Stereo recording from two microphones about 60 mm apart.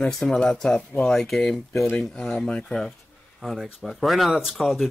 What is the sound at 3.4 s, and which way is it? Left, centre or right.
Speech, centre.